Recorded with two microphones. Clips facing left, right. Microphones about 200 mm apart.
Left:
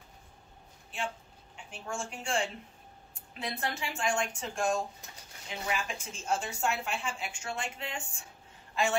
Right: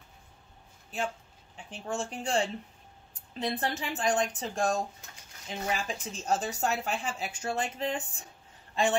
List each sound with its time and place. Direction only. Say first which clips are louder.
1.7 s a woman's voice: right 4 dB; 35° right (ahead or behind)